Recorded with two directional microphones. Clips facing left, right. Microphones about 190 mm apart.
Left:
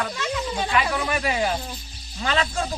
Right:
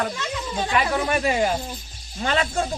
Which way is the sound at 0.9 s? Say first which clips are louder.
Right 3 dB; 25° right (ahead or behind).